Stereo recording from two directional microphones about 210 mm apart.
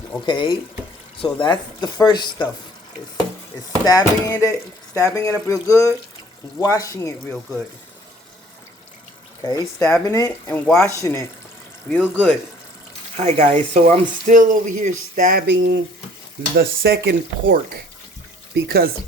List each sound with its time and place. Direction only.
0.3 s speech: 20° left (ahead or behind)
3.8 s speech: 15° left (ahead or behind)
9.4 s speech: 15° left (ahead or behind)
11.9 s speech: centre (ahead or behind)
13.1 s speech: 30° right (ahead or behind); by 18.9 s 50° right (ahead or behind)